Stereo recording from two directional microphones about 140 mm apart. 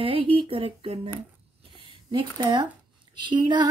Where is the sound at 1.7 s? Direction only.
35° right (ahead or behind).